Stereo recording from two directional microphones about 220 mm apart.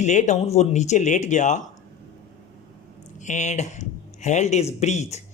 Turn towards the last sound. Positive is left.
turn(degrees=30)  # may be behind; listen again after turning